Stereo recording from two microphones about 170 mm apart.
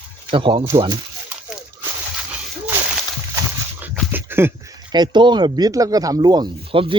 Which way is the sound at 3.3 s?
10° right (ahead or behind).